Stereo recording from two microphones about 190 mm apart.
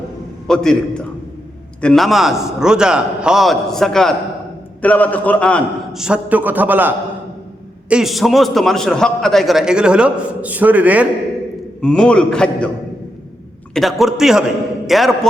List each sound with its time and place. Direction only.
0.4 s a man's voice: 5° left (ahead or behind)
11.8 s a man's voice: 5° left (ahead or behind)
13.7 s a man's voice: centre (ahead or behind)